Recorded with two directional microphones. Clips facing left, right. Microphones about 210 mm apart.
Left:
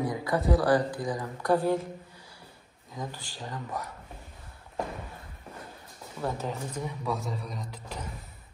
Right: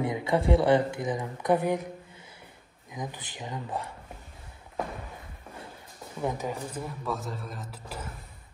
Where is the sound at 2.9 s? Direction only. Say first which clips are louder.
Right 1 dB; 20° right (ahead or behind).